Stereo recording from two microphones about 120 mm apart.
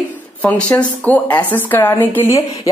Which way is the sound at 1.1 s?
15° left (ahead or behind).